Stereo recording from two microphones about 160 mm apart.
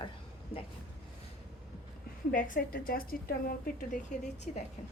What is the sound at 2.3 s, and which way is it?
A woman's voice, 60° left (ahead or behind).